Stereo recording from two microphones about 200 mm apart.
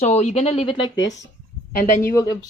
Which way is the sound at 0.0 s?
35° left (ahead or behind).